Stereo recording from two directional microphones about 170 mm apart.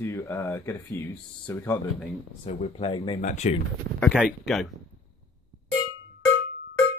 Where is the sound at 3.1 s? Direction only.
45° left (ahead or behind).